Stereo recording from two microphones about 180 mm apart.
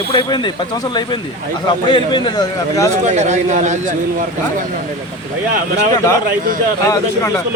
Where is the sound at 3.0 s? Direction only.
40° right (ahead or behind).